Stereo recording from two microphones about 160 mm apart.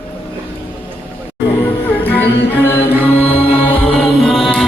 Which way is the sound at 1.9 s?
10° left (ahead or behind).